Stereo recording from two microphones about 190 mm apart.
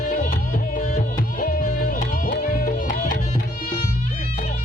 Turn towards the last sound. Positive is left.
turn(degrees=45)  # may be behind; listen again after turning